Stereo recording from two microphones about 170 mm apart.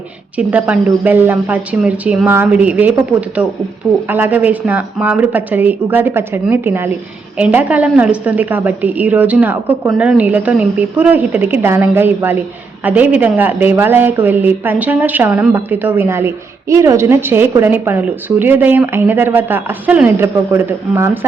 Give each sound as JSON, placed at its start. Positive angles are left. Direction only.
{"t": 0.3, "sound": "speech", "side_deg": -10}